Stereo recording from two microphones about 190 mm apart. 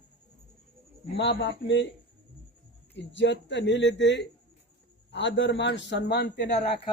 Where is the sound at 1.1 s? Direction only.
70° left (ahead or behind).